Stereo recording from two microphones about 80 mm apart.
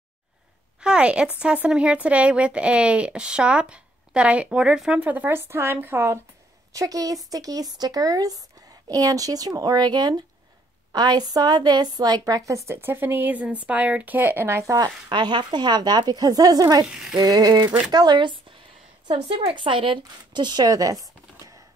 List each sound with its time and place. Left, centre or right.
0.7 s a sound: centre
1.4 s speech: centre
5.0 s speech: right
6.7 s a woman's voice: right
12.8 s speech: right
15.0 s a woman's voice: right
16.9 s speech: centre
17.2 s speech: right
17.9 s speech: right